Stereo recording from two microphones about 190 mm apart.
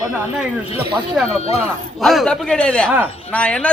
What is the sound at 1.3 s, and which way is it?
Speech, 35° left (ahead or behind).